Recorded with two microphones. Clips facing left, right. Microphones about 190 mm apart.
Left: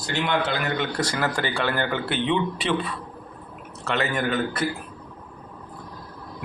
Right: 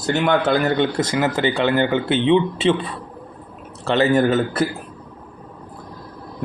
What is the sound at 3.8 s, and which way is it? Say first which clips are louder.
Speech: right 9 dB; 30° right (ahead or behind).